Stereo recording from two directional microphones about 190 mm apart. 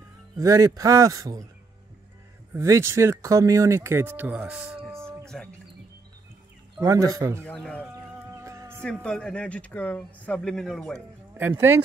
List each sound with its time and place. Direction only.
0.4 s speech: 15° right (ahead or behind)
2.5 s speech: 15° right (ahead or behind)
5.2 s a sound: 5° left (ahead or behind)
6.8 s speech: 15° right (ahead or behind)
7.4 s speech: 5° left (ahead or behind)
7.9 s music: 15° right (ahead or behind)
8.8 s speech: 5° left (ahead or behind)
11.3 s speech: 10° right (ahead or behind)